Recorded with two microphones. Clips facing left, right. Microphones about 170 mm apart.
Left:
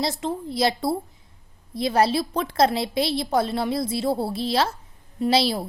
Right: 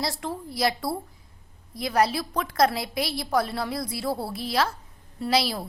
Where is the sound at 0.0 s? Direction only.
20° left (ahead or behind).